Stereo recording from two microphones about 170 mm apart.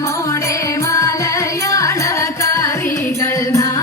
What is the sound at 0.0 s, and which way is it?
Music, 20° left (ahead or behind).